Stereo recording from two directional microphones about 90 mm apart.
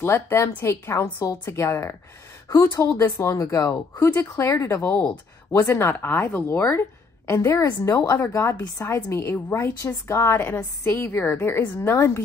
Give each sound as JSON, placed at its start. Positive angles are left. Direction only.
{"t": 0.0, "sound": "a woman's voice", "side_deg": 30}